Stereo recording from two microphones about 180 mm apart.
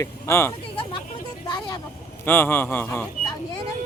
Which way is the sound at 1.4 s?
25° left (ahead or behind).